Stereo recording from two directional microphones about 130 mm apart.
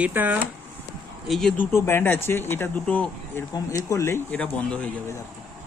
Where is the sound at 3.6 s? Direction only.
25° left (ahead or behind).